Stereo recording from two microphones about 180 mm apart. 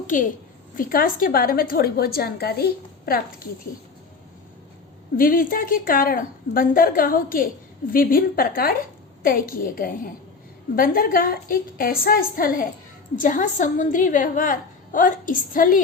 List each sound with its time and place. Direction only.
0.1 s a woman's voice: 45° left (ahead or behind)
5.1 s a woman's voice: 50° left (ahead or behind)